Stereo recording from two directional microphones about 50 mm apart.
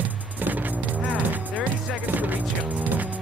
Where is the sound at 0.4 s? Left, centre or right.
Right.